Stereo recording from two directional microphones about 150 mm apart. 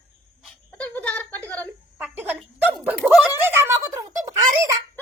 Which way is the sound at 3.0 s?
Centre (ahead or behind).